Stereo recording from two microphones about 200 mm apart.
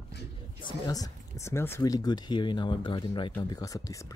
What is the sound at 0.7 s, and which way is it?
Speech, 20° left (ahead or behind).